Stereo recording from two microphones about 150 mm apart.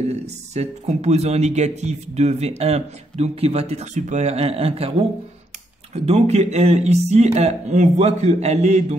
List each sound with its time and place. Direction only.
0.1 s speech: 45° right (ahead or behind)
5.9 s speech: 45° right (ahead or behind)